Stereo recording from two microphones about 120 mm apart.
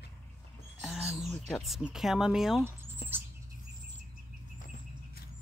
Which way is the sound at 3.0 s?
55° left (ahead or behind).